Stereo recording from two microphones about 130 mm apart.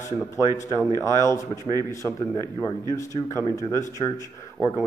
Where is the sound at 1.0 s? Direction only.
25° left (ahead or behind).